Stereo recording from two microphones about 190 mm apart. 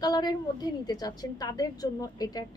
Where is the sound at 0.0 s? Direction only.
20° left (ahead or behind).